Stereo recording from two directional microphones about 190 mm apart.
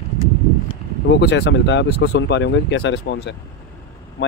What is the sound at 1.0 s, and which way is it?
Speech, 65° left (ahead or behind).